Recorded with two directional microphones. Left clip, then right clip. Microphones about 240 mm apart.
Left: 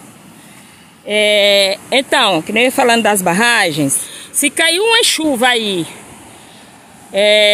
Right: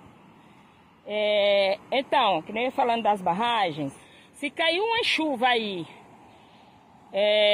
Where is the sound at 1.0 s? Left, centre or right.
Centre.